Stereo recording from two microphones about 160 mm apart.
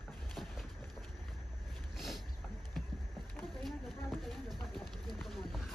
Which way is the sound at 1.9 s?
Centre (ahead or behind).